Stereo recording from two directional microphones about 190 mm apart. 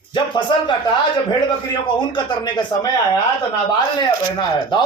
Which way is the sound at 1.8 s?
25° left (ahead or behind).